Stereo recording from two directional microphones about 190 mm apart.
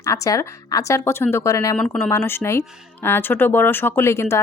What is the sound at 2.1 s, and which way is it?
Speech, 15° left (ahead or behind).